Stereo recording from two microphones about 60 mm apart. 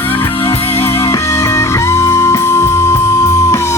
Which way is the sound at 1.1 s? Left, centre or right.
Left.